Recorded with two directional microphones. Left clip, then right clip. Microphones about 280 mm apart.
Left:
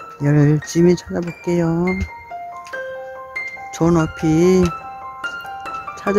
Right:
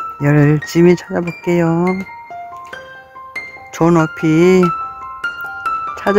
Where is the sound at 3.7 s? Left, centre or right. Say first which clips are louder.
Right 5 dB; centre.